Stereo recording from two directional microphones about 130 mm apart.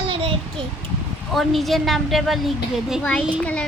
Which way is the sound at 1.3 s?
Centre (ahead or behind).